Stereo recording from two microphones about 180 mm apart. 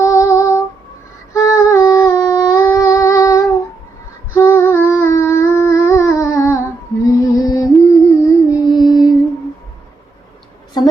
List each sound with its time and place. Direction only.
0.0 s female singing: 15° left (ahead or behind)
1.3 s humming: 15° left (ahead or behind)
7.2 s music: 20° left (ahead or behind)
7.9 s humming: 15° left (ahead or behind)
8.7 s female singing: 25° left (ahead or behind)
10.8 s a sound: 25° left (ahead or behind)